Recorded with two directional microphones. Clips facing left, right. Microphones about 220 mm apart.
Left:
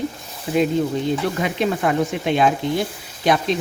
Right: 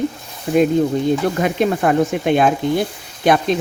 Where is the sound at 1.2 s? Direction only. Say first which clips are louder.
Right 4 dB; 50° right (ahead or behind).